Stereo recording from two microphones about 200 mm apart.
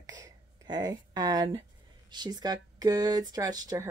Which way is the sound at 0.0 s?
20° right (ahead or behind).